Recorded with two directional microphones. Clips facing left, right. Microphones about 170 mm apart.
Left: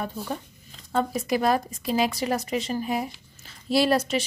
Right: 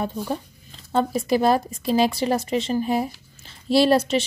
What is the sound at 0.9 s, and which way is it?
A woman's voice, 30° right (ahead or behind).